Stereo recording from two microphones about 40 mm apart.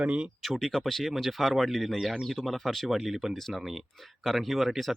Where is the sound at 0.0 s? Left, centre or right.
Right.